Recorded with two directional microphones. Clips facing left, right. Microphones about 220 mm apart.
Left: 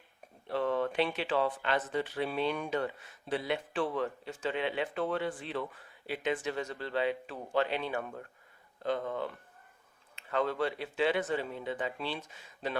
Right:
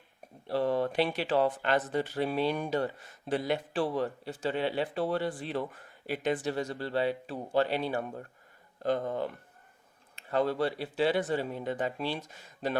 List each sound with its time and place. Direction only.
0.4 s speech: 35° right (ahead or behind)